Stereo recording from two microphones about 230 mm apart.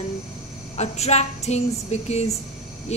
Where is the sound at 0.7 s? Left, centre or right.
Left.